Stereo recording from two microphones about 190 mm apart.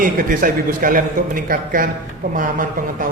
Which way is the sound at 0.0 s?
45° right (ahead or behind).